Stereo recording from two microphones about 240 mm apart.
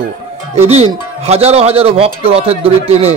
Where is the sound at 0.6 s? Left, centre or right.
Right.